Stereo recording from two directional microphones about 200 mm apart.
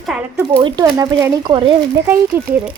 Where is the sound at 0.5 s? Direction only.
20° right (ahead or behind).